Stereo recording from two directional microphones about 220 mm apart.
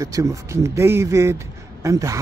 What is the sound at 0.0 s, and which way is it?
Speech, 15° right (ahead or behind).